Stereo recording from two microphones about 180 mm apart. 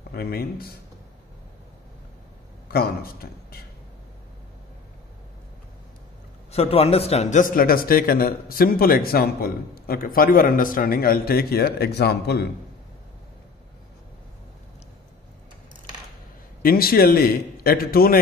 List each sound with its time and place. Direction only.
0.1 s a man's voice: 60° left (ahead or behind)
2.7 s a man's voice: 55° left (ahead or behind)
6.5 s a man's voice: 35° left (ahead or behind); by 12.4 s 65° left (ahead or behind)
16.6 s a man's voice: 55° left (ahead or behind)